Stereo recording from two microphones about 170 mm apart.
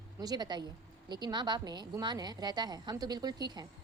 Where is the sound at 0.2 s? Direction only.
25° right (ahead or behind).